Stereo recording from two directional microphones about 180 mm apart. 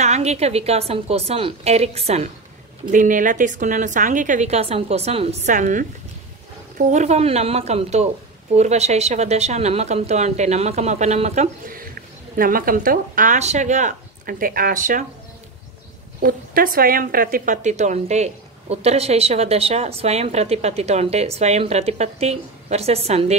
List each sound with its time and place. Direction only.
0.0 s a woman's voice: 40° right (ahead or behind)
2.9 s speech: 45° right (ahead or behind)
5.5 s a woman's voice: 45° right (ahead or behind)
12.4 s speech: 50° right (ahead or behind)
16.2 s a woman's voice: 55° right (ahead or behind); by 23.3 s 35° right (ahead or behind)